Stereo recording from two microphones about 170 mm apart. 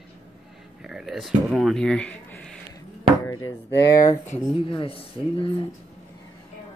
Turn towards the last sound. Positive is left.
turn(degrees=30)  # may be behind; listen again after turning